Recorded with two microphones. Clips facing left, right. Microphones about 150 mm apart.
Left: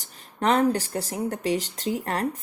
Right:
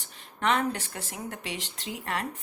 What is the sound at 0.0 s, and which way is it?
A woman's voice, 35° left (ahead or behind).